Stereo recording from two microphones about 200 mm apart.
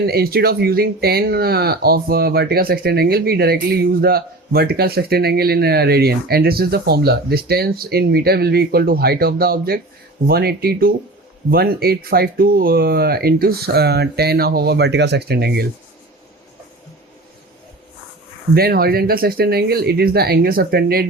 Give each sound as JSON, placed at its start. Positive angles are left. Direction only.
{"t": 0.0, "sound": "speech", "side_deg": -50}
{"t": 18.5, "sound": "speech", "side_deg": -50}